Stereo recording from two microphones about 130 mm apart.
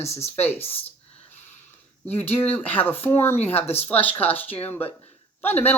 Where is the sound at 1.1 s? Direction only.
15° left (ahead or behind).